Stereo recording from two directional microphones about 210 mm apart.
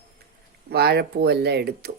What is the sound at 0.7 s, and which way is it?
Speech, 50° right (ahead or behind).